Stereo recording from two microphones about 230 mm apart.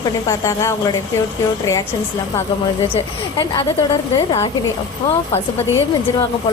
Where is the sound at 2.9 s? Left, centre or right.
Left.